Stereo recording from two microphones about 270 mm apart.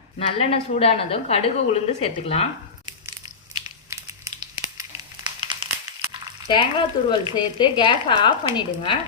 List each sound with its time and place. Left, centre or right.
0.2 s a woman's voice: left
3.5 s a sound: centre
6.5 s speech: centre